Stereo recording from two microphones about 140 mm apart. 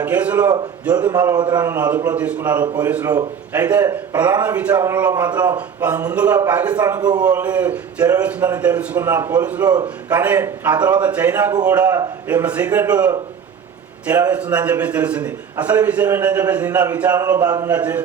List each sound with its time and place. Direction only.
0.0 s a man's voice: 10° right (ahead or behind)
1.1 s a man's voice: 25° right (ahead or behind)
1.7 s a man's voice: 10° right (ahead or behind)
5.3 s a man's voice: 30° right (ahead or behind)
5.5 s a man's voice: 10° right (ahead or behind)
7.0 s a man's voice: 30° right (ahead or behind)
7.3 s a man's voice: 10° right (ahead or behind)
9.6 s a man's voice: 30° right (ahead or behind)
10.1 s a man's voice: 10° right (ahead or behind)
14.1 s a man's voice: 10° right (ahead or behind)
17.4 s a man's voice: 25° right (ahead or behind)
17.7 s a man's voice: 10° right (ahead or behind)